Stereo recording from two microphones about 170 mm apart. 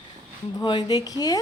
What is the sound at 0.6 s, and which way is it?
Speech, 25° left (ahead or behind).